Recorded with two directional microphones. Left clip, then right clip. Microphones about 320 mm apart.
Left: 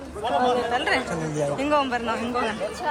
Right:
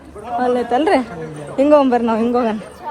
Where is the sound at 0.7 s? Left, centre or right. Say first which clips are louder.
Right 8 dB; centre.